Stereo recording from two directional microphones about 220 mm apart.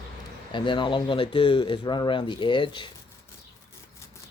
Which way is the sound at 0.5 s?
20° left (ahead or behind).